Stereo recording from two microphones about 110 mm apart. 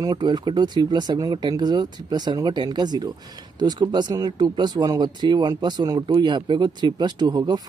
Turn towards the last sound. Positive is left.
turn(degrees=-40)  # may be behind; listen again after turning